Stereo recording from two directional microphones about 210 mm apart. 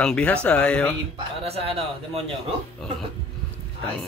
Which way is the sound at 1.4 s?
30° right (ahead or behind).